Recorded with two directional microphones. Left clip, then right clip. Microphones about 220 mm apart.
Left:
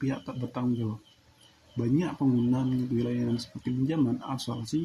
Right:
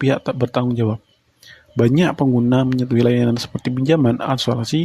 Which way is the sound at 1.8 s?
50° right (ahead or behind).